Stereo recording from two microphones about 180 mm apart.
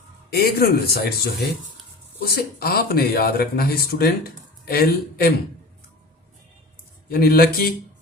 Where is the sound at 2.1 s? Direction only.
60° left (ahead or behind).